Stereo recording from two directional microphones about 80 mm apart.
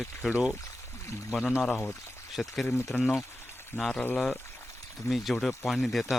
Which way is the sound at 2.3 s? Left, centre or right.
Centre.